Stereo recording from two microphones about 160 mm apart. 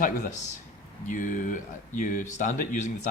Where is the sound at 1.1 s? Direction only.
55° left (ahead or behind).